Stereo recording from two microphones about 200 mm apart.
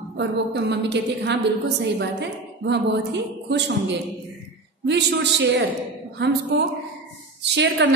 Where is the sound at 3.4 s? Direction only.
60° right (ahead or behind).